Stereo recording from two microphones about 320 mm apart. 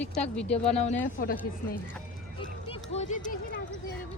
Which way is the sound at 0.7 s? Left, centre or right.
Left.